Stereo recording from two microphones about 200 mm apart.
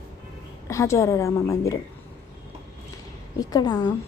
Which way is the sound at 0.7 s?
15° left (ahead or behind).